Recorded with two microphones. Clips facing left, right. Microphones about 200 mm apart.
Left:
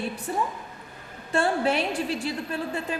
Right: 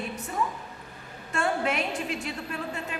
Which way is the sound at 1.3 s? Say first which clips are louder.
Left 4 dB; 30° left (ahead or behind).